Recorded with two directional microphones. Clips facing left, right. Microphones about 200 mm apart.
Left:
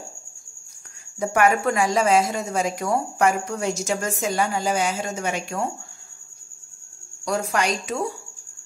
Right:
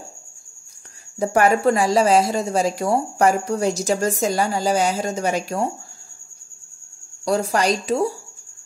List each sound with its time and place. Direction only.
1.2 s a woman's voice: 35° right (ahead or behind)
7.2 s a woman's voice: 35° right (ahead or behind)